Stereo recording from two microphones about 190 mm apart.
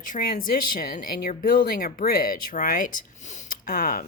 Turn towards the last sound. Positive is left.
turn(degrees=45)  # may be behind; listen again after turning